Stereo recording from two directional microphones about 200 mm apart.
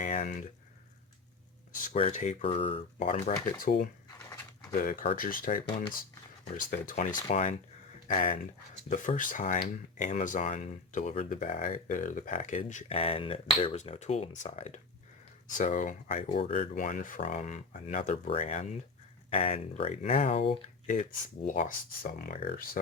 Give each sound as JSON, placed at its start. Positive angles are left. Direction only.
{"t": 0.0, "sound": "speech", "side_deg": 40}
{"t": 1.7, "sound": "speech", "side_deg": 40}
{"t": 3.6, "sound": "speech", "side_deg": 50}